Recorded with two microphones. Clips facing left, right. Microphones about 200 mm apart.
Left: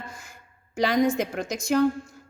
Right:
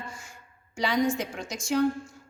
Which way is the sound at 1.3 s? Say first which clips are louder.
Left 5 dB; 60° left (ahead or behind).